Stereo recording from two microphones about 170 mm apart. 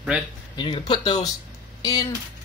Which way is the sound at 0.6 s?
30° left (ahead or behind).